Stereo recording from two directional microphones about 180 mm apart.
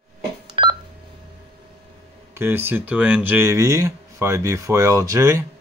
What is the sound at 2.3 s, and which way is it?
Speech, 10° right (ahead or behind).